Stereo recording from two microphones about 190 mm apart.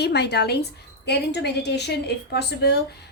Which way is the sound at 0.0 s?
60° left (ahead or behind).